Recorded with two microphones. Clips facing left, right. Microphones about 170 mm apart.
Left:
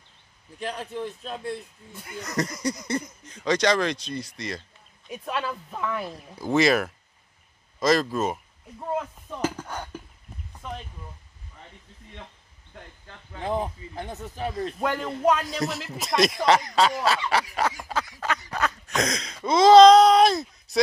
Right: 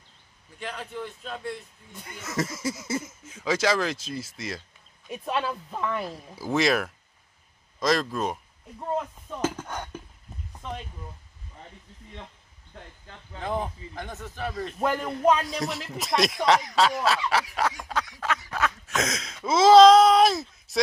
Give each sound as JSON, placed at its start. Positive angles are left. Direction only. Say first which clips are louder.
{"t": 0.7, "sound": "a man's voice", "louder": "left 3 dB", "side_deg": 15}
{"t": 2.1, "sound": "a man's voice", "louder": "left 1 dB", "side_deg": -5}
{"t": 9.3, "sound": "a sound", "louder": "even", "side_deg": 5}
{"t": 13.5, "sound": "a man's voice", "louder": "left 2 dB", "side_deg": 5}